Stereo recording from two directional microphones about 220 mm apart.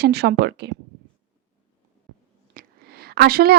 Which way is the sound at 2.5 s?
40° right (ahead or behind).